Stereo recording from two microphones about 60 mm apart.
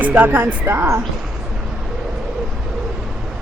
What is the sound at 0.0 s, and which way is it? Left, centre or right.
Speech, right.